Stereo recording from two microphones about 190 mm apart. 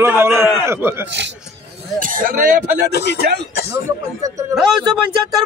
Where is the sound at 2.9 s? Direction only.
60° left (ahead or behind).